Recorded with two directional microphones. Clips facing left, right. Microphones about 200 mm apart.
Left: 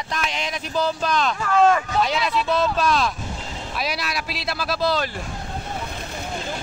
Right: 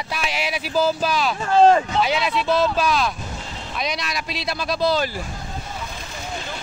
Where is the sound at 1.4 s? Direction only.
30° right (ahead or behind).